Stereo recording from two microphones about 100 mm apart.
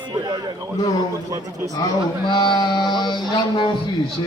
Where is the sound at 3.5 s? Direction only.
55° left (ahead or behind).